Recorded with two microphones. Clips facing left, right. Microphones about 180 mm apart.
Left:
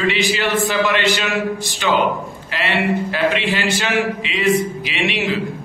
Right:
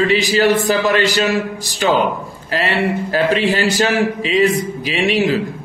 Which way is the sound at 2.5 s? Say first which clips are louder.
Right 2 dB; 40° right (ahead or behind).